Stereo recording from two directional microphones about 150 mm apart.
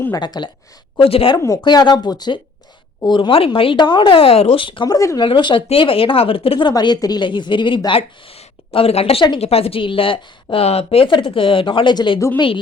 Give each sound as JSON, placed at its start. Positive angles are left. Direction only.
{"t": 0.0, "sound": "speech", "side_deg": 25}
{"t": 1.4, "sound": "speech", "side_deg": 25}
{"t": 4.9, "sound": "speech", "side_deg": 20}
{"t": 5.2, "sound": "speech", "side_deg": 35}